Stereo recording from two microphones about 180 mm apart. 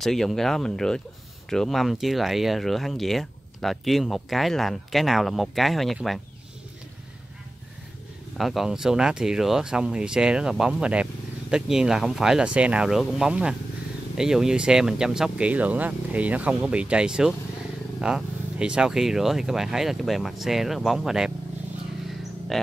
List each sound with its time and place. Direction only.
0.0 s speech: centre (ahead or behind)
8.4 s speech: centre (ahead or behind)
22.5 s speech: centre (ahead or behind)